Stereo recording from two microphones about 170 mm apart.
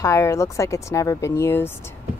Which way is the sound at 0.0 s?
15° left (ahead or behind).